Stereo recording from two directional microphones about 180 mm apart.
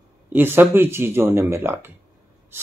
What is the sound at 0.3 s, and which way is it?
Speech, 10° right (ahead or behind).